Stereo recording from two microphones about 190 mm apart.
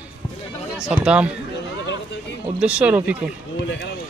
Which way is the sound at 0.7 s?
5° right (ahead or behind).